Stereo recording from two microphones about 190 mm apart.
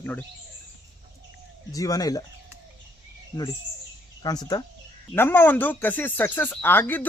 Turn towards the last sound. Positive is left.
turn(degrees=10)  # may be behind; listen again after turning